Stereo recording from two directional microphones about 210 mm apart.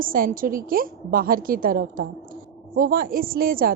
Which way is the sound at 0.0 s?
40° right (ahead or behind).